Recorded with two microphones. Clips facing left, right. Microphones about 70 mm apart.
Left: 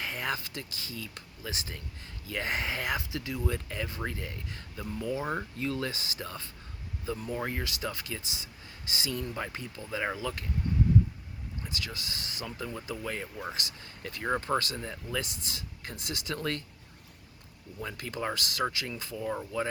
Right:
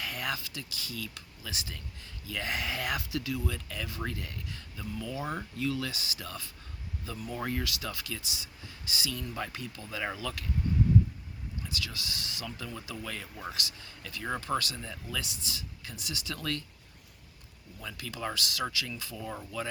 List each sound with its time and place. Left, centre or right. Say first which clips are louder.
0.0 s speech: left 2 dB; left
5.6 s speech: right 1 dB; left
11.7 s speech: even; left
17.7 s speech: left 4 dB; left
19.1 s speech: left 6 dB; centre